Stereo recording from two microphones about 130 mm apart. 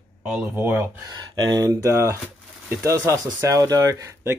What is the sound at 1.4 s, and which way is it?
Speech, 30° right (ahead or behind).